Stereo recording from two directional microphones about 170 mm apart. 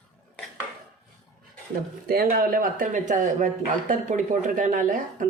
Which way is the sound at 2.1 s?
60° right (ahead or behind).